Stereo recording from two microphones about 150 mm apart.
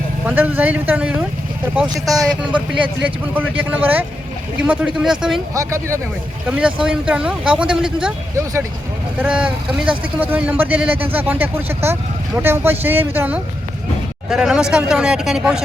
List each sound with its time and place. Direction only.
0.3 s speech: 10° right (ahead or behind)
2.2 s speech: 10° right (ahead or behind)
5.5 s speech: 20° right (ahead or behind)
6.6 s speech: 5° right (ahead or behind)
9.2 s speech: 10° right (ahead or behind)